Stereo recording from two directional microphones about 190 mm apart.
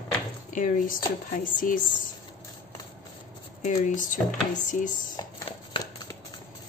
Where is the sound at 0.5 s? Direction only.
45° left (ahead or behind).